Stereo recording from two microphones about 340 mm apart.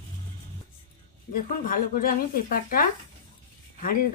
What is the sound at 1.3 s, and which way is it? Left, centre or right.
Speech, left.